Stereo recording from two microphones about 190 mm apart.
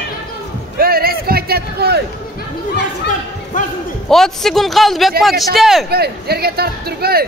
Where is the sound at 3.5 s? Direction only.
45° left (ahead or behind).